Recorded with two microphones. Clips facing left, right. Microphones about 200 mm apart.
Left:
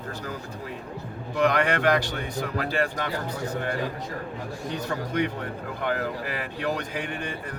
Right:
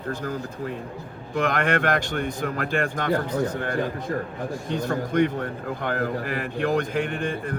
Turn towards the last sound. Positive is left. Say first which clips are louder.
# right 5 dB
turn(degrees=-50)  # may be behind; listen again after turning